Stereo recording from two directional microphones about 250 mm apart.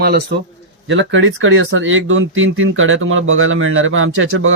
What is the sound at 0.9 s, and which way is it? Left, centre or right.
Speech, right.